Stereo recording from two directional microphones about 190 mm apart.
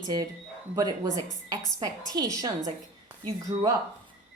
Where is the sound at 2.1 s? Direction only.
20° right (ahead or behind).